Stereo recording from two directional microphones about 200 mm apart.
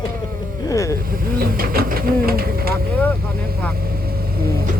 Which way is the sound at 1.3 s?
45° right (ahead or behind).